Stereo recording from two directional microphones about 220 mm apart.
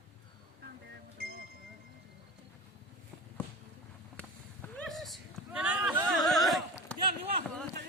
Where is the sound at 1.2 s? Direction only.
45° right (ahead or behind).